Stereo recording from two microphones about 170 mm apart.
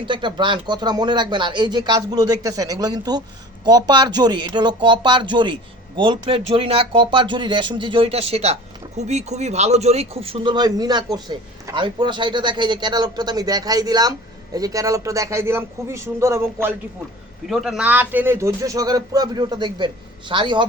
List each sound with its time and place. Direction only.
0.0 s speech: 30° right (ahead or behind)
17.4 s speech: centre (ahead or behind); by 20.7 s 30° right (ahead or behind)